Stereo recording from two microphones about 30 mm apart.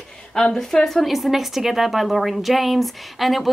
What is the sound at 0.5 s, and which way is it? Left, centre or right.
Speech, centre.